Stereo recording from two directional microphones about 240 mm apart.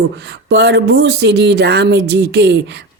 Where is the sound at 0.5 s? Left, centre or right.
Right.